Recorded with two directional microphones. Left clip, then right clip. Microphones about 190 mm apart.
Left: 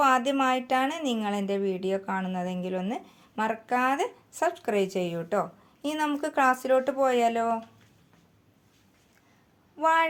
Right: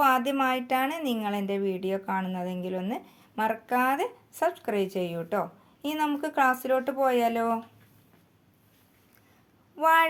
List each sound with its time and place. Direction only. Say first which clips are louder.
0.0 s a woman's voice: left 1 dB; 5° left (ahead or behind)
9.7 s speech: right 2 dB; 30° right (ahead or behind)